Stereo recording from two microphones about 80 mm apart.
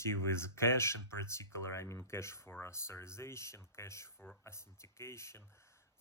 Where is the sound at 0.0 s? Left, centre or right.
Left.